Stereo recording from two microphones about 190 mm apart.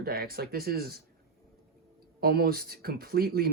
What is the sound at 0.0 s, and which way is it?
Speech, 55° right (ahead or behind).